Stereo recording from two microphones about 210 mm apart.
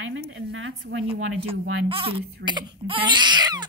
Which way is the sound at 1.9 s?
25° right (ahead or behind).